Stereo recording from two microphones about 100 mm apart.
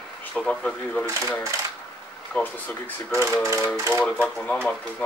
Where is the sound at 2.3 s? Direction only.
15° left (ahead or behind).